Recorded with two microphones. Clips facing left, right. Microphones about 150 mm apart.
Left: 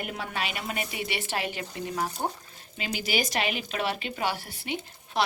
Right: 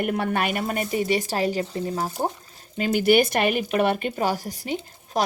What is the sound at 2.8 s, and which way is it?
A woman's voice, 50° right (ahead or behind).